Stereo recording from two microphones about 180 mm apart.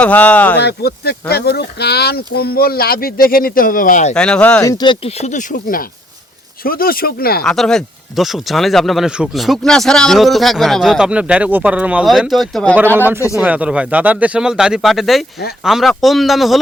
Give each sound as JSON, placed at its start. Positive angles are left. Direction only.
{"t": 0.0, "sound": "speech", "side_deg": 10}
{"t": 0.6, "sound": "speech", "side_deg": 60}
{"t": 4.1, "sound": "speech", "side_deg": 5}
{"t": 4.6, "sound": "speech", "side_deg": 20}
{"t": 5.2, "sound": "speech", "side_deg": 45}
{"t": 7.4, "sound": "speech", "side_deg": 0}
{"t": 12.7, "sound": "speech", "side_deg": -10}